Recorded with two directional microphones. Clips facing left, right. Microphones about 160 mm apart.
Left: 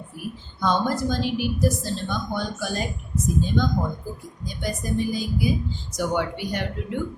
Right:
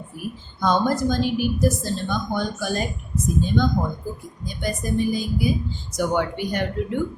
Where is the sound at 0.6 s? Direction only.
45° right (ahead or behind).